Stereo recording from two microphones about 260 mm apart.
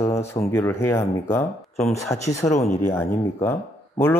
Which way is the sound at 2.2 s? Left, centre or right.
Left.